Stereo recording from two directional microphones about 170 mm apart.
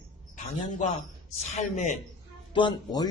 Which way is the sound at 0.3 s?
45° left (ahead or behind).